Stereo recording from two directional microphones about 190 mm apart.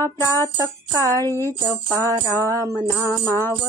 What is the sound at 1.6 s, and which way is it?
Music, 15° right (ahead or behind).